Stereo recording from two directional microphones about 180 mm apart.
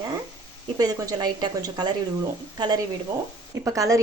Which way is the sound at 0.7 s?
20° right (ahead or behind).